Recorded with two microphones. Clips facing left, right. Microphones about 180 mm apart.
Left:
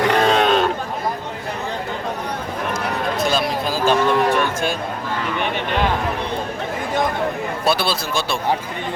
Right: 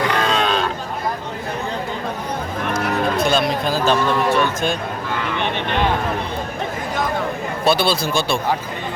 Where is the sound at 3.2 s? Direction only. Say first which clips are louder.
Right 2 dB; 5° left (ahead or behind).